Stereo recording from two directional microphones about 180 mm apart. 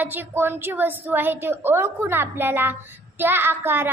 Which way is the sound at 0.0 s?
10° right (ahead or behind).